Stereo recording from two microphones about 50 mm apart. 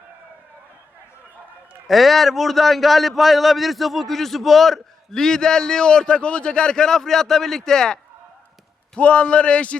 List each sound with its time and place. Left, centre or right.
1.9 s a man's voice: centre
9.0 s a man's voice: left